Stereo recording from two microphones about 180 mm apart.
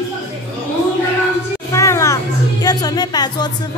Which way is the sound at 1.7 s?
15° left (ahead or behind).